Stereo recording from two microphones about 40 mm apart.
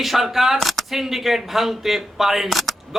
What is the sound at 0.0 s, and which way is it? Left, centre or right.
A man's voice, centre.